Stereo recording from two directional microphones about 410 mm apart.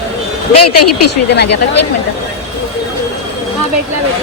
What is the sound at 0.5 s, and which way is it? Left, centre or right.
Speech, left.